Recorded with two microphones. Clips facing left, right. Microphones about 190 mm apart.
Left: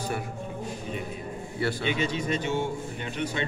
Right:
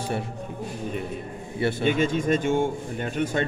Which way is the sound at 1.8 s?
50° right (ahead or behind).